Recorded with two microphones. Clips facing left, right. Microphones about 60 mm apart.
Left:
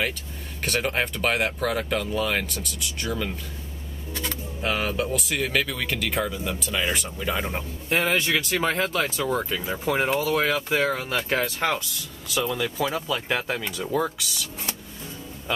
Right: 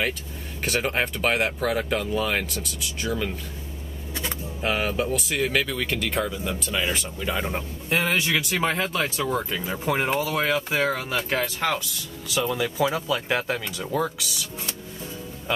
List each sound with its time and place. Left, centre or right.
0.7 s speech: centre
4.1 s a sound: centre
4.6 s speech: centre
9.2 s speech: centre
11.6 s speech: centre
12.3 s speech: centre